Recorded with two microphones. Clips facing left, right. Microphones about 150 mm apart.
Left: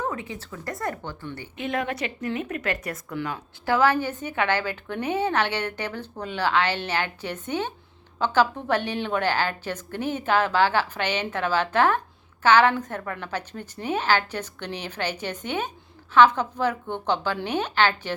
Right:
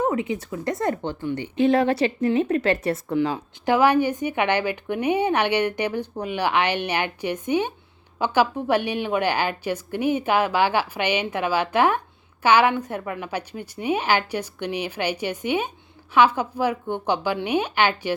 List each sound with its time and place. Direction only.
0.0 s speech: 20° right (ahead or behind)
1.5 s a woman's voice: 30° right (ahead or behind)
3.2 s a woman's voice: 20° right (ahead or behind)